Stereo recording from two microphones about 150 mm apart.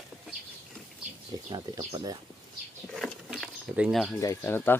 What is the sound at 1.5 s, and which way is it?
Speech, 25° right (ahead or behind).